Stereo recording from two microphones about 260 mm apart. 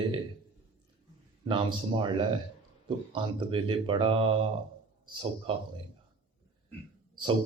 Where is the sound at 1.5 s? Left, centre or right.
Centre.